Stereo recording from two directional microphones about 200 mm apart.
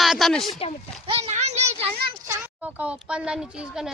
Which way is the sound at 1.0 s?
30° right (ahead or behind).